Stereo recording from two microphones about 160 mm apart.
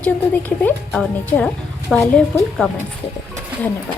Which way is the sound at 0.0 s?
10° left (ahead or behind).